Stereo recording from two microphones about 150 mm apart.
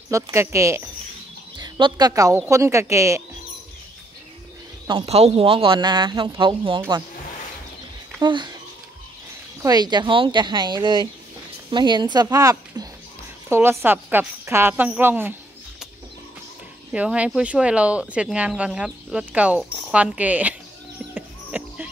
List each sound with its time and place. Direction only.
0.1 s speech: 20° right (ahead or behind)
1.6 s a woman's voice: 30° right (ahead or behind)
5.0 s speech: 45° right (ahead or behind)
8.2 s speech: 30° right (ahead or behind)
9.6 s speech: 25° right (ahead or behind)
16.9 s speech: 10° right (ahead or behind)
21.1 s music: 10° right (ahead or behind)